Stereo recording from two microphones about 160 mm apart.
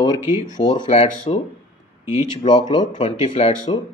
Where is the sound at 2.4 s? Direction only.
45° left (ahead or behind).